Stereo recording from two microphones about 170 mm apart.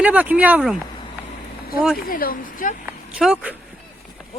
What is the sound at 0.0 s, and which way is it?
Speech, 10° right (ahead or behind).